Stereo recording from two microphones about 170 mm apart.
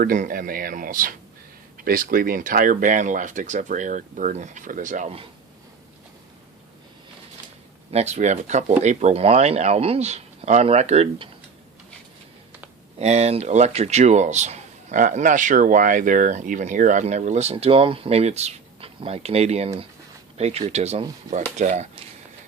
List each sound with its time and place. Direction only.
0.0 s speech: 55° right (ahead or behind)
7.9 s speech: 40° right (ahead or behind)
13.0 s speech: 40° right (ahead or behind)